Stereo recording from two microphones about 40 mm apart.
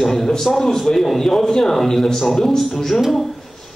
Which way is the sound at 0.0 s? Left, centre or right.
Centre.